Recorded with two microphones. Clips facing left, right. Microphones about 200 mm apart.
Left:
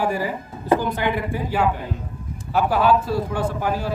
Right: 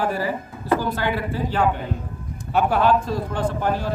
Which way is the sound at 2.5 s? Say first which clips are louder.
Even; 5° left (ahead or behind).